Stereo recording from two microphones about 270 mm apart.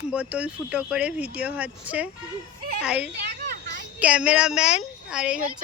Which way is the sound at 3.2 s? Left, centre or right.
Right.